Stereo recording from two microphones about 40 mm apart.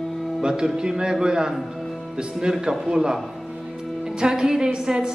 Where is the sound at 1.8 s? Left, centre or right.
Centre.